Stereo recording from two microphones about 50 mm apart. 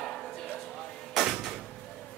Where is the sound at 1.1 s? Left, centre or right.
Centre.